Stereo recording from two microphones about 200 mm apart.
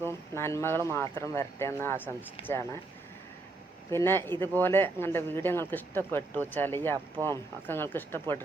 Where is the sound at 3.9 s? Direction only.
10° left (ahead or behind).